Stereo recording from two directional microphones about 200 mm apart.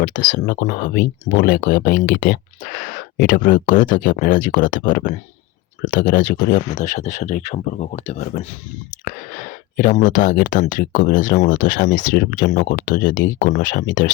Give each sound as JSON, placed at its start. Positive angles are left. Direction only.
{"t": 0.0, "sound": "speech", "side_deg": 40}